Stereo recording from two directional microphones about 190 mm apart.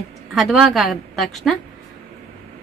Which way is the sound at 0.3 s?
Centre (ahead or behind).